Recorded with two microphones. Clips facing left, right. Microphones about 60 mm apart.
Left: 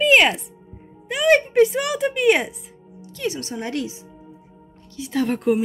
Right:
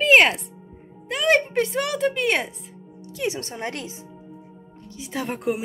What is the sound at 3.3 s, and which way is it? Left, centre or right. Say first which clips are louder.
Speech: left 4 dB; right.